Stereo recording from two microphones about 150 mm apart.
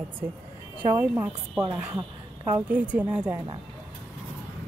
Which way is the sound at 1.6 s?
30° right (ahead or behind).